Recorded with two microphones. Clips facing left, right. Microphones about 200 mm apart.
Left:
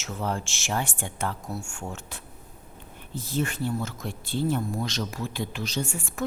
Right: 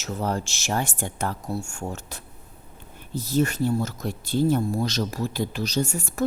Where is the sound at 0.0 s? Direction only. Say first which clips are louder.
Right 3 dB; 40° right (ahead or behind).